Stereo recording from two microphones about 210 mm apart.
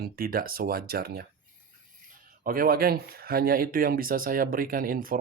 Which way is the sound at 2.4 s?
45° right (ahead or behind).